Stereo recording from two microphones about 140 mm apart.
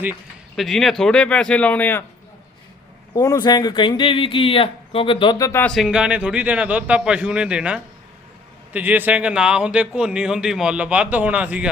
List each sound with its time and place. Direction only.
0.5 s speech: centre (ahead or behind)
3.2 s speech: 25° left (ahead or behind)
5.4 s speech: 20° left (ahead or behind)
5.6 s speech: centre (ahead or behind)